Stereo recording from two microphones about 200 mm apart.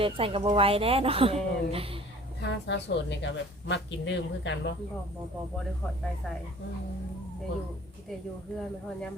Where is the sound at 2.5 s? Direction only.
60° left (ahead or behind).